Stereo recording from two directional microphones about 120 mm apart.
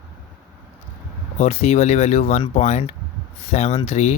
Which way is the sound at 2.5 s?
90° left.